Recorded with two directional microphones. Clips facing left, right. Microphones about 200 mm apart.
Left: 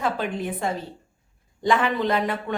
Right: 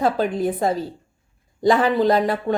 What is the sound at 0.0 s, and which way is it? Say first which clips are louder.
Speech: right 6 dB; 35° right (ahead or behind).